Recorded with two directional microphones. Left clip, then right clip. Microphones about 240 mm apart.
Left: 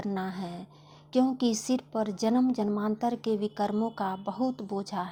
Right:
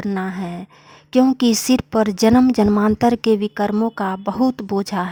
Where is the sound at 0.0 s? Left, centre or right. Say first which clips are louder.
Right 9 dB; right.